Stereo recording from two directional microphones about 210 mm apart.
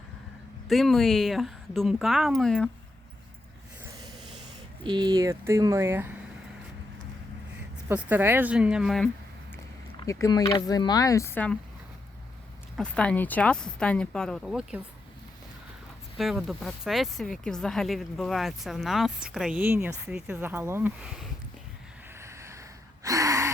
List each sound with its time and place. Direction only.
0.7 s speech: centre (ahead or behind)
3.9 s snort: 20° right (ahead or behind)
4.8 s speech: 20° right (ahead or behind)
7.9 s speech: 10° right (ahead or behind)
10.0 s speech: 15° left (ahead or behind)
12.7 s speech: 5° left (ahead or behind)
16.1 s speech: centre (ahead or behind)
22.2 s a sound: 15° right (ahead or behind)
23.0 s gasp: 15° right (ahead or behind)